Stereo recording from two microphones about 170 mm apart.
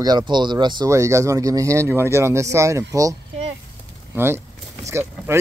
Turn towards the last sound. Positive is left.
turn(degrees=-15)  # may be behind; listen again after turning